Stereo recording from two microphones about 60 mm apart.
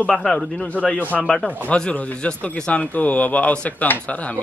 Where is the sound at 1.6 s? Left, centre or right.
Left.